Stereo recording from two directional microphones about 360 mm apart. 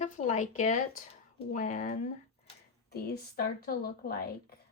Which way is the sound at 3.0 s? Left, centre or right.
Left.